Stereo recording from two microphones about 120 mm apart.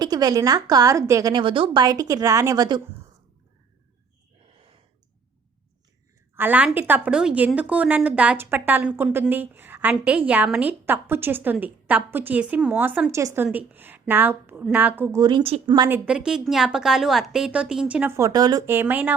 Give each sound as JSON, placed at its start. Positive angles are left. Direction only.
{"t": 0.0, "sound": "a woman's voice", "side_deg": -35}
{"t": 6.3, "sound": "a woman's voice", "side_deg": -15}
{"t": 15.2, "sound": "a woman's voice", "side_deg": -40}
{"t": 15.4, "sound": "speech", "side_deg": -50}
{"t": 16.0, "sound": "a woman's voice", "side_deg": -5}
{"t": 18.2, "sound": "a woman's voice", "side_deg": -35}
{"t": 18.6, "sound": "a woman's voice", "side_deg": -20}